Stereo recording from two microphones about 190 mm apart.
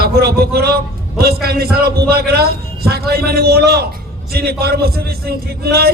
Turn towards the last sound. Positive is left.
turn(degrees=-55)  # may be behind; listen again after turning